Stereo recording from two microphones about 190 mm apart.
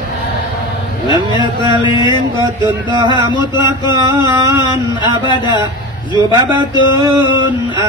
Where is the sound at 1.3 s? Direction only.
25° left (ahead or behind).